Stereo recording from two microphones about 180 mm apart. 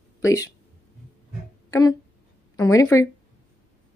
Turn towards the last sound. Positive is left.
turn(degrees=15)  # may be behind; listen again after turning